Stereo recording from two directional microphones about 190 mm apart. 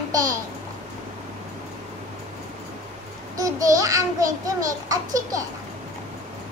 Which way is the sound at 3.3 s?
20° right (ahead or behind).